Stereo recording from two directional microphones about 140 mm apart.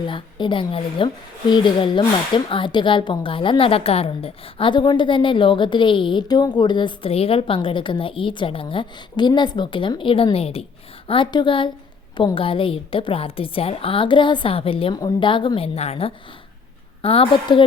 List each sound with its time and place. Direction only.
0.0 s speech: 35° left (ahead or behind)
11.1 s speech: 35° left (ahead or behind)